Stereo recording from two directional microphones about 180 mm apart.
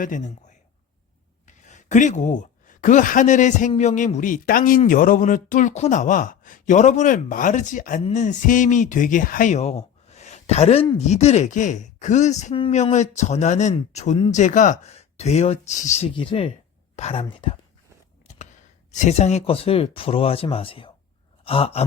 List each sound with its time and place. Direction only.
0.0 s speech: 45° left (ahead or behind)
1.6 s speech: 45° left (ahead or behind)
18.9 s speech: 40° left (ahead or behind)
21.4 s sigh: 30° left (ahead or behind)